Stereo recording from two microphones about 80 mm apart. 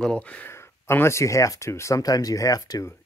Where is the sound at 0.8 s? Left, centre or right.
Left.